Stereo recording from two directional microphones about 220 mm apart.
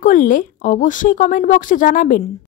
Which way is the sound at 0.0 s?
35° left (ahead or behind).